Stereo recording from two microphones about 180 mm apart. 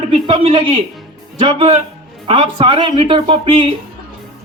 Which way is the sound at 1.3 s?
30° right (ahead or behind).